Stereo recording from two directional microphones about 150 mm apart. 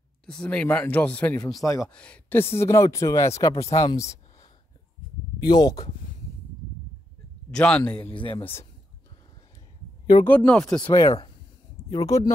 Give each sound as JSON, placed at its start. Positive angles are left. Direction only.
{"t": 0.3, "sound": "speech", "side_deg": 5}
{"t": 1.6, "sound": "speech", "side_deg": 20}
{"t": 1.9, "sound": "speech", "side_deg": 5}
{"t": 7.5, "sound": "speech", "side_deg": 5}
{"t": 8.0, "sound": "speech", "side_deg": 35}
{"t": 10.2, "sound": "speech", "side_deg": 10}
{"t": 10.8, "sound": "speech", "side_deg": 25}